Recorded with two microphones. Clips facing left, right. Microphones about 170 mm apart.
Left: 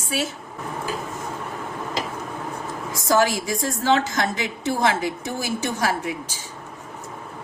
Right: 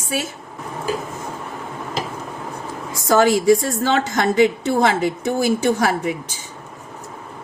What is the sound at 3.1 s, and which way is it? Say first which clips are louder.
A woman's voice: right 7 dB; 55° right (ahead or behind).